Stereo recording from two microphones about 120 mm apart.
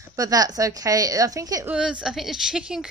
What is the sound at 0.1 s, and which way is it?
A woman's voice, 30° right (ahead or behind).